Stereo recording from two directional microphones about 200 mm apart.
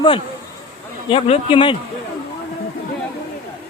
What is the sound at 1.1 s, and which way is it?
Speech, 30° left (ahead or behind).